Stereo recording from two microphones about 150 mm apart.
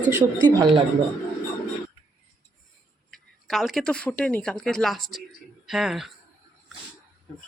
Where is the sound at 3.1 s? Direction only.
Centre (ahead or behind).